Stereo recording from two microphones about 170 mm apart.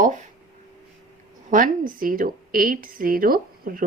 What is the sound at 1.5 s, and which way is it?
Speech, 55° right (ahead or behind).